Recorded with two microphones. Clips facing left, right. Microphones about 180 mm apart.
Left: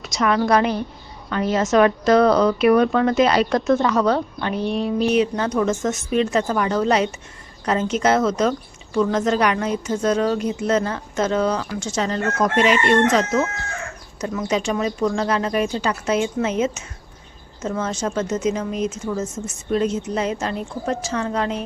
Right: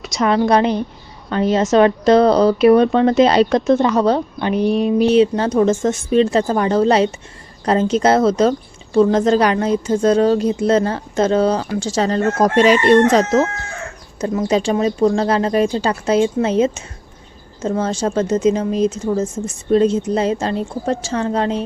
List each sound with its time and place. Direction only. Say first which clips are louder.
0.2 s a woman's voice: right 3 dB; 25° right (ahead or behind)
3.7 s speech: right 4 dB; 20° right (ahead or behind)
3.9 s a woman's voice: right 3 dB; 30° right (ahead or behind)
4.4 s speech: right 6 dB; 20° right (ahead or behind)
5.1 s a woman's voice: right 6 dB; 30° right (ahead or behind)